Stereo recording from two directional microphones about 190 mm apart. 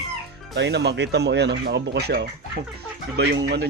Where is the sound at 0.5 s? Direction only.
65° right (ahead or behind).